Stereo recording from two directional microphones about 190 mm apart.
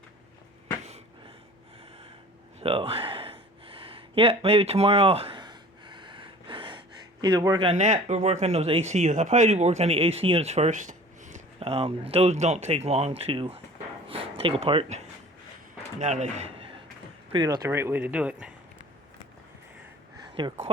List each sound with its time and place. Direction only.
2.6 s a sound: 30° right (ahead or behind)
7.7 s speech: 35° right (ahead or behind)
14.1 s a sound: 30° right (ahead or behind)
16.0 s a man's voice: 40° right (ahead or behind)
17.3 s speech: 20° right (ahead or behind)
20.3 s speech: 25° right (ahead or behind)